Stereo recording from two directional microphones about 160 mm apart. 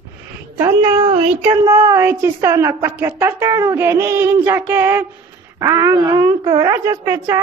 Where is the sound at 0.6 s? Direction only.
20° right (ahead or behind).